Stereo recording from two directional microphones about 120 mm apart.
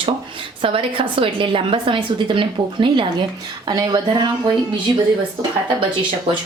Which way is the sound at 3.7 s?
30° right (ahead or behind).